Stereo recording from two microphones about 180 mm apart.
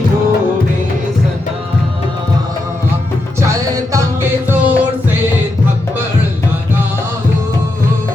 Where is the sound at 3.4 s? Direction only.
20° right (ahead or behind).